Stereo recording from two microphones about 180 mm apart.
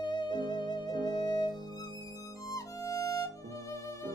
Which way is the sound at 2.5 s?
20° left (ahead or behind).